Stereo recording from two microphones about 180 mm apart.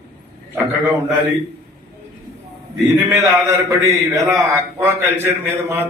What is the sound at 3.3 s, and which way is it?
A man's voice, 15° right (ahead or behind).